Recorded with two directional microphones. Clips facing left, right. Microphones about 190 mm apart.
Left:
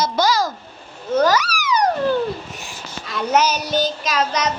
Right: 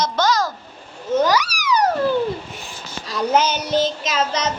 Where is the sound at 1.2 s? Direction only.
15° right (ahead or behind).